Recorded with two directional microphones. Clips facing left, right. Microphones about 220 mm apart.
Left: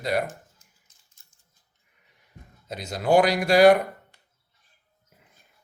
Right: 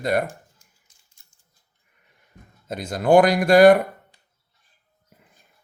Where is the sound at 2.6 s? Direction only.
50° right (ahead or behind).